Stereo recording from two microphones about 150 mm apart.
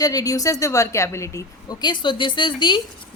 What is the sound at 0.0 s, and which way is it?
A woman's voice, 25° left (ahead or behind).